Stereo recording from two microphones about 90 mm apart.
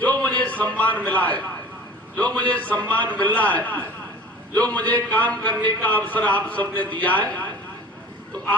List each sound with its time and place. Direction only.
0.0 s a man's voice: 15° left (ahead or behind)